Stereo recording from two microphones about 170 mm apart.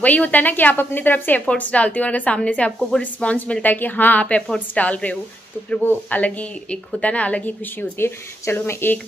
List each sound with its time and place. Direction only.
0.0 s a woman's voice: 10° left (ahead or behind)